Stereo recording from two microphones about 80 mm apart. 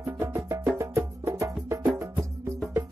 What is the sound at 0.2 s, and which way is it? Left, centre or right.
Music, right.